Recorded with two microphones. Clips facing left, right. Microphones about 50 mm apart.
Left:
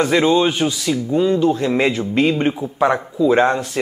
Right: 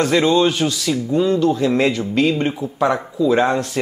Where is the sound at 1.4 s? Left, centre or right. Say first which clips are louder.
Even; left.